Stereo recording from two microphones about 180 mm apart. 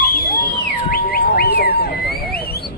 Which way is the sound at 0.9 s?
55° left (ahead or behind).